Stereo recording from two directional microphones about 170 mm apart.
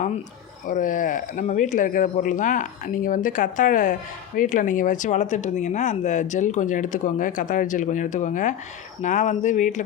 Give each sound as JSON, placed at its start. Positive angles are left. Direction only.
{"t": 0.7, "sound": "speech", "side_deg": 50}